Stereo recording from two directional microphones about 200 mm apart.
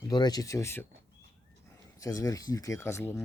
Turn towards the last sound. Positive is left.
turn(degrees=15)  # may be behind; listen again after turning